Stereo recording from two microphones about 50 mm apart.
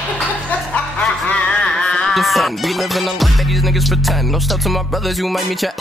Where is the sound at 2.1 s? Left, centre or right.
Centre.